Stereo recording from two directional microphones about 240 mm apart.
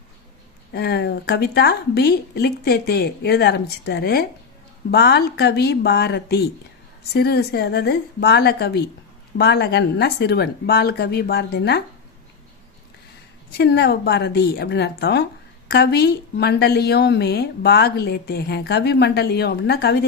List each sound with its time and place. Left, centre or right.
0.7 s a woman's voice: left
13.5 s a woman's voice: left